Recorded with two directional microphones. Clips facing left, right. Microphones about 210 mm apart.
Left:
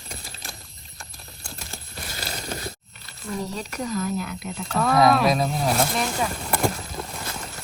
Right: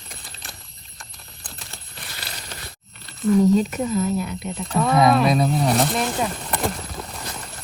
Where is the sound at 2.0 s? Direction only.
45° left (ahead or behind).